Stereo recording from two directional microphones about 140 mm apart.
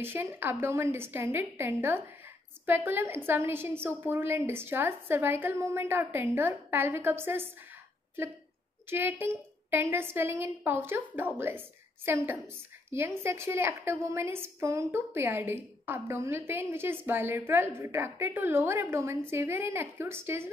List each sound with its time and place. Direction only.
0.0 s a woman's voice: 15° right (ahead or behind)
8.9 s a woman's voice: 15° right (ahead or behind)